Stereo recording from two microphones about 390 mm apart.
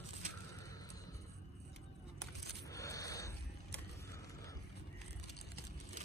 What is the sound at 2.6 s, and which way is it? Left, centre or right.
Scrape, centre.